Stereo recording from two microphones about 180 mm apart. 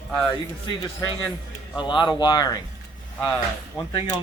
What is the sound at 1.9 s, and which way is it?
Speech, 25° left (ahead or behind).